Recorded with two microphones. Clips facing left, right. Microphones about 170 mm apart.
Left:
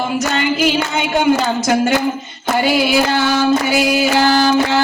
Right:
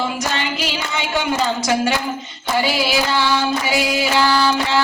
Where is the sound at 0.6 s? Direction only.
50° left (ahead or behind).